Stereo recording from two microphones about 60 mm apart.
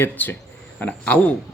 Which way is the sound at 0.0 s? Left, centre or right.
Left.